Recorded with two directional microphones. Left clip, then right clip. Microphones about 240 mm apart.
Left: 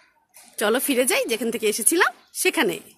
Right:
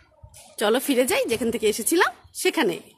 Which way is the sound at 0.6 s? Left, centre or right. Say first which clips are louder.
Even; centre.